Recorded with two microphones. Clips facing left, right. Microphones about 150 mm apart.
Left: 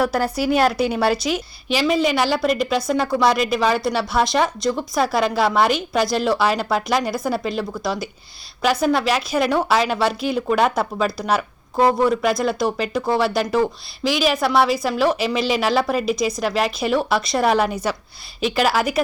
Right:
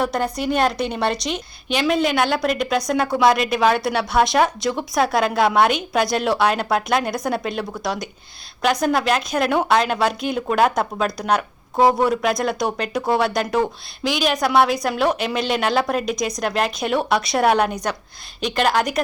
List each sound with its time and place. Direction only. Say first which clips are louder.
0.0 s a woman's voice: left 2 dB; 5° left (ahead or behind)